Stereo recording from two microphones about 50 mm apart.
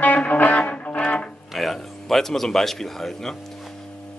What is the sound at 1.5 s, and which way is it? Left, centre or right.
A man's voice, centre.